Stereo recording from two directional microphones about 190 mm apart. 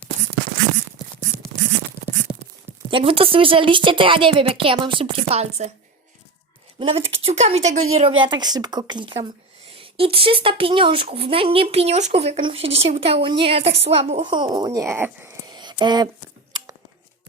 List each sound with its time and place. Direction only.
2.9 s speech: 30° right (ahead or behind)
6.7 s a woman's voice: 30° right (ahead or behind)
8.2 s speech: 20° right (ahead or behind)
15.5 s a sound: 25° right (ahead or behind)